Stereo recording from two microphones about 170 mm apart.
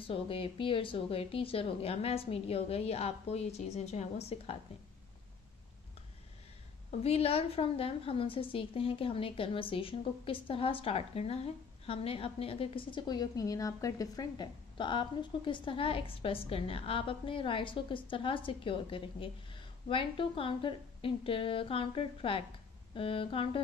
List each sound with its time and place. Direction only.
0.0 s a woman's voice: 35° left (ahead or behind)
6.9 s a woman's voice: 35° left (ahead or behind)